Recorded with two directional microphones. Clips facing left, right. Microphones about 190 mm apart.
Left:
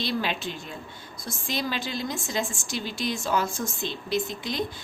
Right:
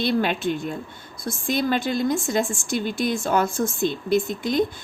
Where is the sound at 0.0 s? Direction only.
55° right (ahead or behind).